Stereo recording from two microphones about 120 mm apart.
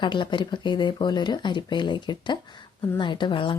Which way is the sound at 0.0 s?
40° left (ahead or behind).